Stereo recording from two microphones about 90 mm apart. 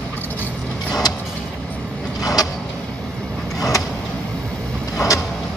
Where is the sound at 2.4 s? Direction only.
45° left (ahead or behind).